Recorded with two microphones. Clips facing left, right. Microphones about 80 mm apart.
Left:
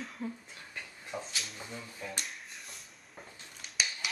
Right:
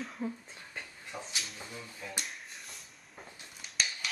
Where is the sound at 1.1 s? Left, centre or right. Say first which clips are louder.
Left 2 dB; centre.